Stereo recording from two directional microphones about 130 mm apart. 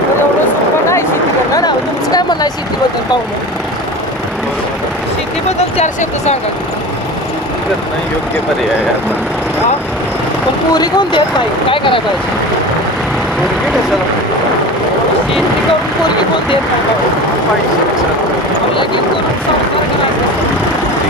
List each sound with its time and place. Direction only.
1.5 s vehicle: 30° left (ahead or behind)
5.5 s speech: 55° left (ahead or behind)
10.7 s speech: 30° left (ahead or behind)